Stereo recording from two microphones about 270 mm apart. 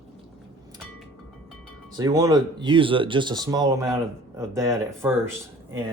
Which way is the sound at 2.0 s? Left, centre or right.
Centre.